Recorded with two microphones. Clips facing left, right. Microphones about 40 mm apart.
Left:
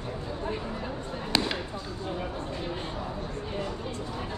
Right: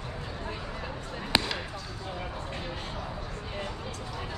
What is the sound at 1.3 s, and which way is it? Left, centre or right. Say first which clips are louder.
Basketball bounce: even; right.